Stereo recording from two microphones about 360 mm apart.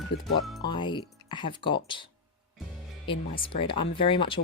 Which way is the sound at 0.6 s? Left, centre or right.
Centre.